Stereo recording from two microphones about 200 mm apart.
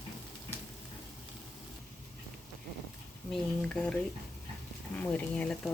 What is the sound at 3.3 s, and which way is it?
Speech, 5° left (ahead or behind).